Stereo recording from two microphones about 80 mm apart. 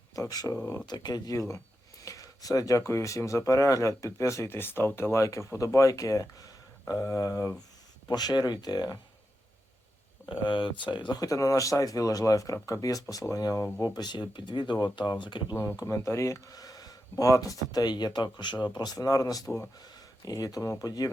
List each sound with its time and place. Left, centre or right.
0.2 s speech: left
1.4 s speech: left
8.0 s speech: left
10.2 s speech: left
11.2 s speech: left
13.8 s speech: left
15.2 s speech: left
15.8 s speech: left